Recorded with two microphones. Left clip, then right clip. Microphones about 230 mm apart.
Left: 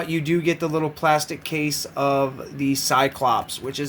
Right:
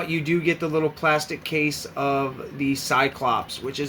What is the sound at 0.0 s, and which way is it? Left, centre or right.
Speech, left.